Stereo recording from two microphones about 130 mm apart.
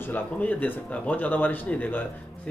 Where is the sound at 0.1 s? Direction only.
15° left (ahead or behind).